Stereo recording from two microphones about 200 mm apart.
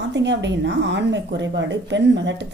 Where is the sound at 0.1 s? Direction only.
60° right (ahead or behind).